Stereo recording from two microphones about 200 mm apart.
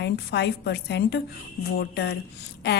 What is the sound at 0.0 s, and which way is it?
Speech, 55° left (ahead or behind).